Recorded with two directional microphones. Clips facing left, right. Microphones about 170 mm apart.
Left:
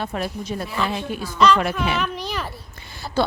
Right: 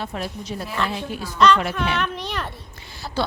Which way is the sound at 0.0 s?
55° left (ahead or behind).